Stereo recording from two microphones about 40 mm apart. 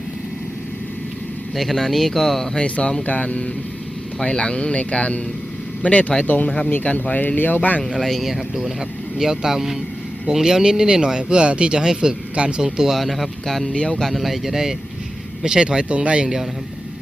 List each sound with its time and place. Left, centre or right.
1.5 s speech: centre
2.6 s speech: left
7.9 s speech: centre
12.9 s speech: centre
13.7 s speech: left
14.0 s speech: centre; by 16.3 s right